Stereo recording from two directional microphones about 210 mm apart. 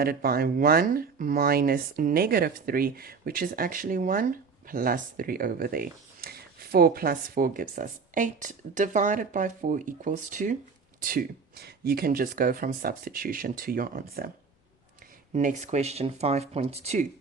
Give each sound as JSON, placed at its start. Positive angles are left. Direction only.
{"t": 0.0, "sound": "speech", "side_deg": -45}
{"t": 15.3, "sound": "speech", "side_deg": -35}